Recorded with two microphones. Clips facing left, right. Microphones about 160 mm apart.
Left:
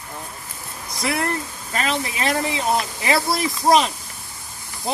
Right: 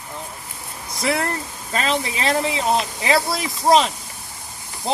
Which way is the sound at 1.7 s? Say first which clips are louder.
Right 2 dB; 25° right (ahead or behind).